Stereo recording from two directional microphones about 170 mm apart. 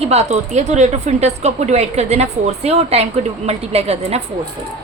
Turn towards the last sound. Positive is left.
turn(degrees=-40)  # may be behind; listen again after turning